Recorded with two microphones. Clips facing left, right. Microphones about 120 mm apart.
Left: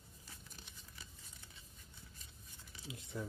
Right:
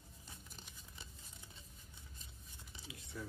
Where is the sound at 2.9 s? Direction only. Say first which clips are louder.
Left 4 dB; 25° left (ahead or behind).